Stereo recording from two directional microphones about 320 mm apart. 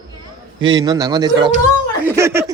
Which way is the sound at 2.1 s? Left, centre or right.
Centre.